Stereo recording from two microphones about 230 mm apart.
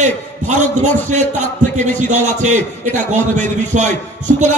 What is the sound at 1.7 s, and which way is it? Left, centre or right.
A man's voice, right.